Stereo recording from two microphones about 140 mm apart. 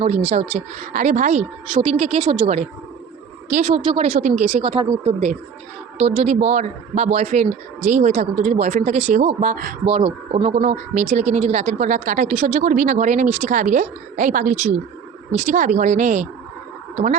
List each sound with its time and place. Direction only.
0.0 s speech: 50° right (ahead or behind)
1.7 s speech: 45° right (ahead or behind)
3.8 s speech: 45° right (ahead or behind)
9.8 s speech: 40° right (ahead or behind); by 16.3 s 55° right (ahead or behind)